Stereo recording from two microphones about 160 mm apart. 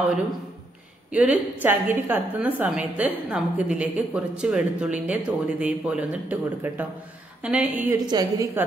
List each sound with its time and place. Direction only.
1.1 s a woman's voice: 10° right (ahead or behind)
8.1 s a woman's voice: 25° right (ahead or behind)